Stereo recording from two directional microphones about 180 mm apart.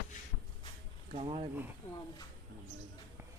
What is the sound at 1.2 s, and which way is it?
Speech, 30° right (ahead or behind).